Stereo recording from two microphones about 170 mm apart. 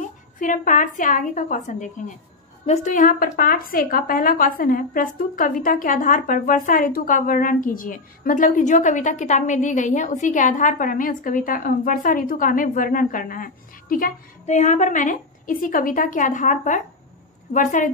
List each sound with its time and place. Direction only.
0.0 s a woman's voice: 50° left (ahead or behind)